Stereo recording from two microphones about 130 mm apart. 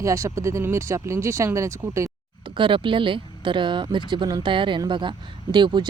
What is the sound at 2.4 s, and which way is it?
Speech, 40° right (ahead or behind).